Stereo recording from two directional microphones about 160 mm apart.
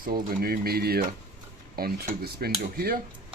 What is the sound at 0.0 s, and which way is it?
Speech, 70° right (ahead or behind).